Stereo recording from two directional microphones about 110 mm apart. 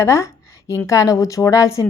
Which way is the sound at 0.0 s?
25° left (ahead or behind).